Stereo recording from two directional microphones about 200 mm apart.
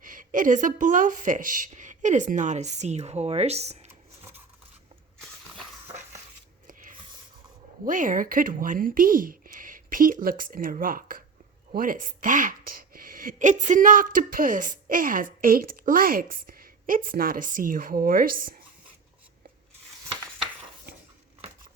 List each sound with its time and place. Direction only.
0.0 s speech: 40° right (ahead or behind)
7.9 s speech: 40° right (ahead or behind)